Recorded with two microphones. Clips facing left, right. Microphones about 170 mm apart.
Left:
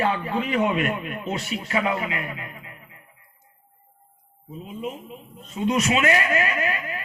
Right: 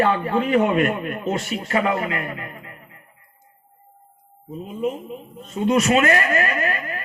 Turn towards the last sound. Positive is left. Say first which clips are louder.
# right 2 dB
turn(degrees=-60)  # may be behind; listen again after turning